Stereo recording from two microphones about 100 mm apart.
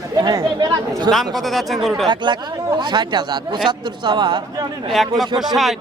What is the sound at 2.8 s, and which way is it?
Speech, 45° right (ahead or behind).